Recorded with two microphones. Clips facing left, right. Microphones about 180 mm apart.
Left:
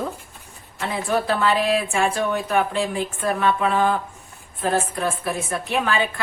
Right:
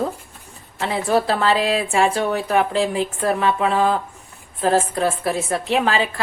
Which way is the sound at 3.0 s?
30° right (ahead or behind).